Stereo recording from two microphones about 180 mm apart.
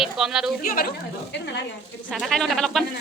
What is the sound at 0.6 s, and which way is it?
Speech, 55° left (ahead or behind).